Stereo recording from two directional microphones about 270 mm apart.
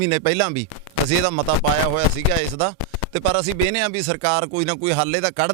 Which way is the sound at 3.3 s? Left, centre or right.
Centre.